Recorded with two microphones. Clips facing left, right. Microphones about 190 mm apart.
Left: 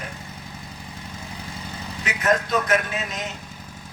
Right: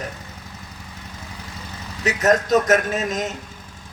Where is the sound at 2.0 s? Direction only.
40° right (ahead or behind).